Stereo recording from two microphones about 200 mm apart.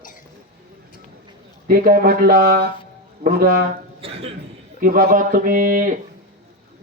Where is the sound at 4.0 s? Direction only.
30° right (ahead or behind).